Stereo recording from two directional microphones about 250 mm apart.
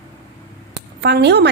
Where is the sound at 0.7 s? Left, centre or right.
Right.